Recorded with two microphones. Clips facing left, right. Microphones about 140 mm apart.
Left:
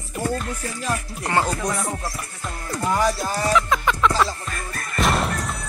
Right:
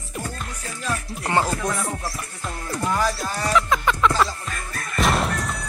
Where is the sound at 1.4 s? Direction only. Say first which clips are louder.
Even; 5° right (ahead or behind).